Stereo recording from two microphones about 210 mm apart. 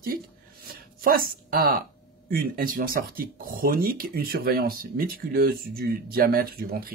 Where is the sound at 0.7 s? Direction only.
45° right (ahead or behind).